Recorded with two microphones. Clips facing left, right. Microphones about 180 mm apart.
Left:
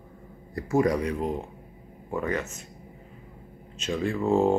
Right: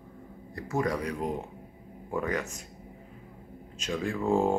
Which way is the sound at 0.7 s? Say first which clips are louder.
Left 6 dB; 25° left (ahead or behind).